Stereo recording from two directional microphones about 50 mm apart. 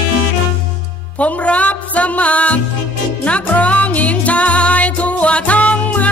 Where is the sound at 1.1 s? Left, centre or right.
Left.